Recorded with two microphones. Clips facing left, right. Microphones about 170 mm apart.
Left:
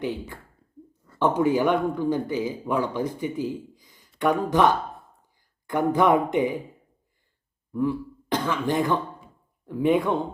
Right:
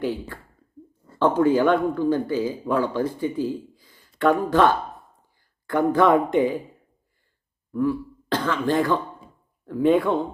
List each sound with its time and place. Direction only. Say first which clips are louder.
0.0 s speech: right 3 dB; 20° left (ahead or behind)
7.7 s speech: right 2 dB; 20° left (ahead or behind)